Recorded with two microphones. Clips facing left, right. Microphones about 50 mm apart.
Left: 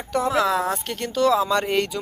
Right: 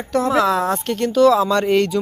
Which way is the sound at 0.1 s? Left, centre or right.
Centre.